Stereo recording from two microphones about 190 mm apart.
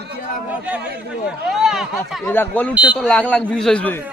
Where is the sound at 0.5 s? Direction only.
5° right (ahead or behind).